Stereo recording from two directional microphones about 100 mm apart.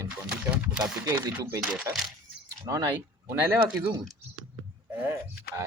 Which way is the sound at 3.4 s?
15° right (ahead or behind).